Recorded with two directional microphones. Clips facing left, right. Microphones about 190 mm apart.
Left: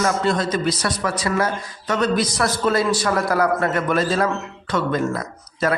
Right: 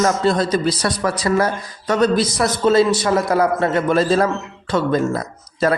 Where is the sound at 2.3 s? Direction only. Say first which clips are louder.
Right 5 dB; 20° right (ahead or behind).